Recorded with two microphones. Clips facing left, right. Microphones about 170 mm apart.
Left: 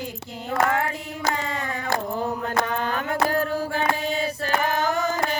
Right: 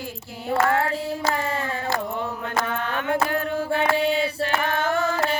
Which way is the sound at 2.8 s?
35° left (ahead or behind).